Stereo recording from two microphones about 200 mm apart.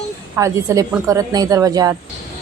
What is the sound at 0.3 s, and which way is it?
A woman's voice, 15° right (ahead or behind).